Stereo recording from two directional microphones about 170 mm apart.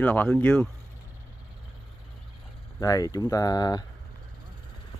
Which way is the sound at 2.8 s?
20° left (ahead or behind).